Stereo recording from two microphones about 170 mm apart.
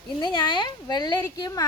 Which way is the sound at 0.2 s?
25° left (ahead or behind).